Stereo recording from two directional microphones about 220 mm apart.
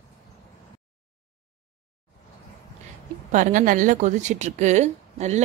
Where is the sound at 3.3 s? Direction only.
35° right (ahead or behind).